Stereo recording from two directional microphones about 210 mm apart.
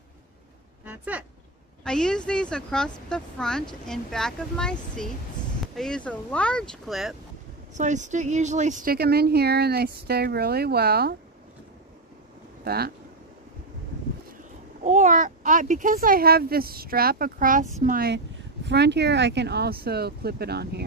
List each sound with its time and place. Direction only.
0.8 s a sound: 5° right (ahead or behind)
1.9 s speech: 5° left (ahead or behind)
7.7 s a child's voice: 35° right (ahead or behind)
12.6 s speech: 50° right (ahead or behind)
14.8 s a child's voice: 35° right (ahead or behind); by 20.8 s 50° right (ahead or behind)